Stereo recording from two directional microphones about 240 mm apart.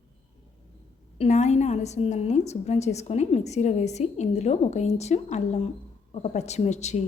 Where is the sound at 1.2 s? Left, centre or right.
Left.